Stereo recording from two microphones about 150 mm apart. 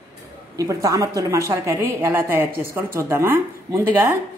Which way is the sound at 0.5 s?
25° right (ahead or behind).